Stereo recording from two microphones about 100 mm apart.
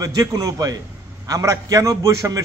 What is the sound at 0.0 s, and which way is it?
A man's voice, 35° right (ahead or behind).